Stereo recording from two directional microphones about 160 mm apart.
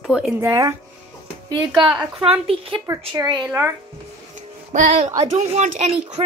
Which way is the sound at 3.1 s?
25° right (ahead or behind).